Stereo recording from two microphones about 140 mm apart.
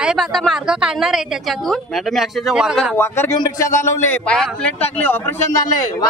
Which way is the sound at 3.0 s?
15° left (ahead or behind).